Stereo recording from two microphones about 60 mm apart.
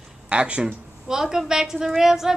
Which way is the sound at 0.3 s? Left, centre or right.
Centre.